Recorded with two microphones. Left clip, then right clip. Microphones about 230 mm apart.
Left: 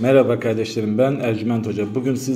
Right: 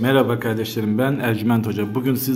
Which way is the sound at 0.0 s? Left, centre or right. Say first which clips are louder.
Left 3 dB; centre.